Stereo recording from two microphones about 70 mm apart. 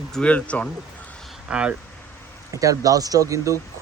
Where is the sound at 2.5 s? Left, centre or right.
Right.